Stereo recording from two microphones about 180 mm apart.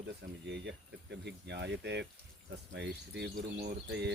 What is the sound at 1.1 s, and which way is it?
Speech, 70° right (ahead or behind).